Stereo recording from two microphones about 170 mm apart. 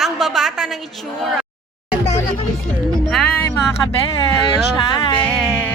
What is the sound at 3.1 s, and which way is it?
Music, 5° left (ahead or behind).